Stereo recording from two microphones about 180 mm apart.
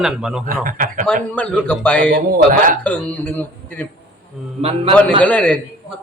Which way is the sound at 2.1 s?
50° right (ahead or behind).